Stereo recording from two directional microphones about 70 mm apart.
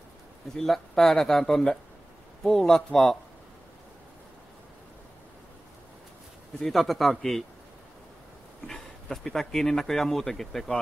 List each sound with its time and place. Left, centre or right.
0.6 s speech: centre
6.6 s a man's voice: centre
8.6 s speech: centre